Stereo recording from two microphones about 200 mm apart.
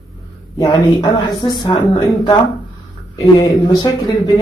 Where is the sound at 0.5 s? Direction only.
20° left (ahead or behind).